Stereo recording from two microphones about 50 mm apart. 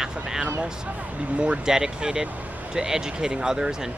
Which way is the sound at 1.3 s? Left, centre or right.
Right.